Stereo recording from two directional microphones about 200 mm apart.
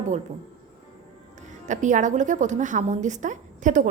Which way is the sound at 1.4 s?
40° right (ahead or behind).